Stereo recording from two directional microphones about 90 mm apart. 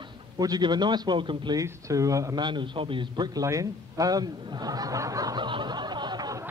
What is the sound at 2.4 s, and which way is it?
Speech, 60° right (ahead or behind).